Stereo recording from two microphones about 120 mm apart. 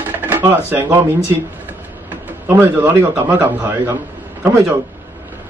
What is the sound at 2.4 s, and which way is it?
A man's voice, 15° right (ahead or behind).